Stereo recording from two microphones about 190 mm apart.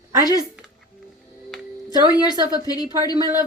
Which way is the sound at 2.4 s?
20° left (ahead or behind).